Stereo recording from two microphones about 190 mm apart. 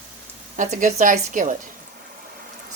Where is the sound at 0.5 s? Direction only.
40° right (ahead or behind).